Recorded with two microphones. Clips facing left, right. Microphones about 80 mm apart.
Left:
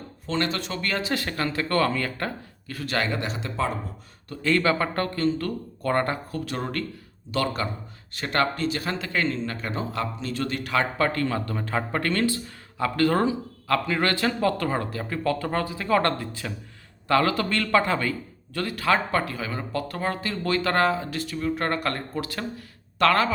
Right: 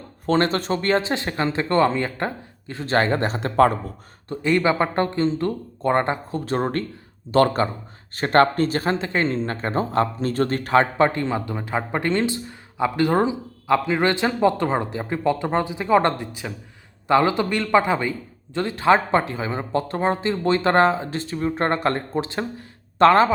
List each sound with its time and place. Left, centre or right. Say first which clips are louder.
0.3 s speech: right 7 dB; right
4.3 s speech: right 3 dB; centre